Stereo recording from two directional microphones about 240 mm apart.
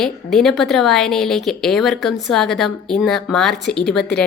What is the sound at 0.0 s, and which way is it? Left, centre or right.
A woman's voice, centre.